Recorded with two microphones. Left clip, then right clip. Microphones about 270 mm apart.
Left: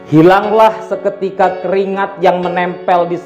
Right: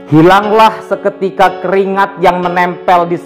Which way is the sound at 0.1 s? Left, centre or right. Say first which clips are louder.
Right 2 dB; right.